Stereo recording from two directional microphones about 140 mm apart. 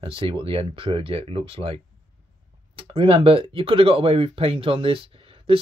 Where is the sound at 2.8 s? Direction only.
40° right (ahead or behind).